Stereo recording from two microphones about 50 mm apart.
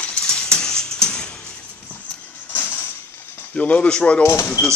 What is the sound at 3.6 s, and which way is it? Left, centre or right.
Speech, left.